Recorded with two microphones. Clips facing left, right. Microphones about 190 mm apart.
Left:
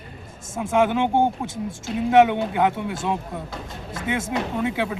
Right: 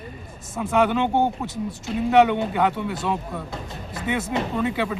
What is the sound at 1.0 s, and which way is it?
Speech, 10° left (ahead or behind).